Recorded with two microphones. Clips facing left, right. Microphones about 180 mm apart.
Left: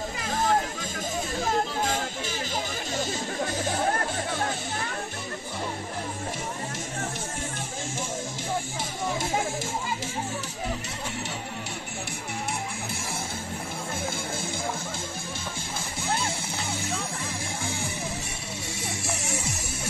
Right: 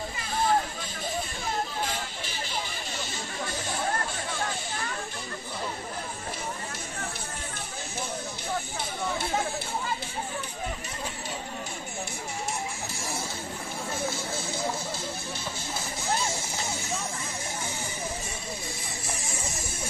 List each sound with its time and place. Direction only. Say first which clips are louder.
0.3 s music: left 1 dB; 45° left (ahead or behind)
1.8 s music: left 5 dB; 45° left (ahead or behind)
18.8 s music: left 4 dB; 75° left (ahead or behind)